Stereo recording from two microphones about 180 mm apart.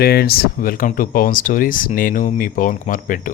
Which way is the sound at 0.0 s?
60° left (ahead or behind).